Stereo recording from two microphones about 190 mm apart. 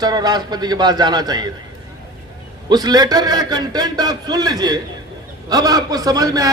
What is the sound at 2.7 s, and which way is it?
A man's voice, 20° right (ahead or behind).